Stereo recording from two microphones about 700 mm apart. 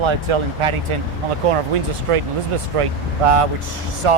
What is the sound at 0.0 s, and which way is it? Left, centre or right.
Speech, right.